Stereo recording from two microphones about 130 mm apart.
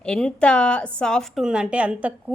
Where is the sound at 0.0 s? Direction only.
5° left (ahead or behind).